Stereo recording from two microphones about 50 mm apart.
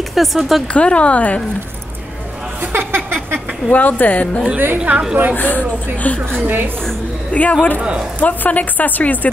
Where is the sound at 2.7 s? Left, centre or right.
Right.